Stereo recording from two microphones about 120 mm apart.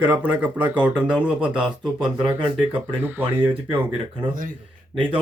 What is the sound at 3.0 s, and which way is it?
Speech, 15° right (ahead or behind).